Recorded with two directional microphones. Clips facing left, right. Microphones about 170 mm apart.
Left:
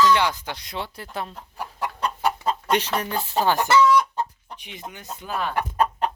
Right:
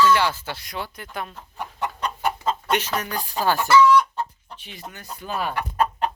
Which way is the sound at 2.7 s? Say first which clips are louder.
Left 3 dB; 30° left (ahead or behind).